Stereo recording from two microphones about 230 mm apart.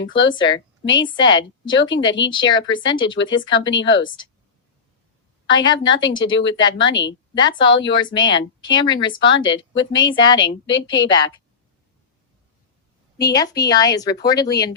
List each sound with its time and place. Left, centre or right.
0.3 s a woman's voice: centre
3.7 s a woman's voice: left
5.5 s speech: centre
6.9 s a woman's voice: left
7.3 s speech: centre
7.7 s a woman's voice: left
7.9 s speech: centre
10.9 s a woman's voice: left
13.3 s speech: centre